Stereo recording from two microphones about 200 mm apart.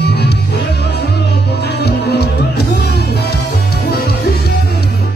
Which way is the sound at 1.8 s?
55° left (ahead or behind).